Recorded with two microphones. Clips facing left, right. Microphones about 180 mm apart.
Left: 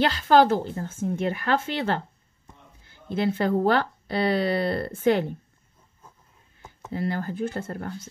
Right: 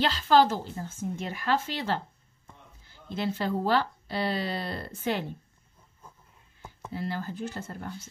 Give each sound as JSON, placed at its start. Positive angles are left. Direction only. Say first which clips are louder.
{"t": 0.0, "sound": "speech", "louder": "left 3 dB", "side_deg": 55}
{"t": 6.9, "sound": "speech", "louder": "left 5 dB", "side_deg": 55}